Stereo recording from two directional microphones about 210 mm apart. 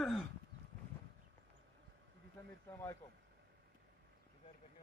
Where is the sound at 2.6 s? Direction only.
15° left (ahead or behind).